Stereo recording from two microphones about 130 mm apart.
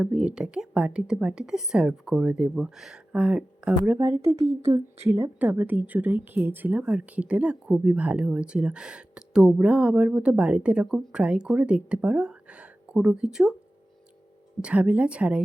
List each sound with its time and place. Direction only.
0.0 s speech: 5° right (ahead or behind)
14.6 s speech: 10° right (ahead or behind)